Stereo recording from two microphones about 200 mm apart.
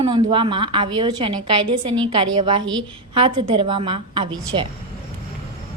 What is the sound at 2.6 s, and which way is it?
Speech, 70° right (ahead or behind).